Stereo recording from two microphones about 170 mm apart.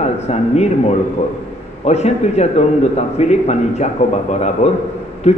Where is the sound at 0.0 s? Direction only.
40° left (ahead or behind).